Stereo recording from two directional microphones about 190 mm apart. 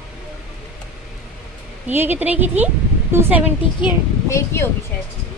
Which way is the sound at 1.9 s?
10° right (ahead or behind).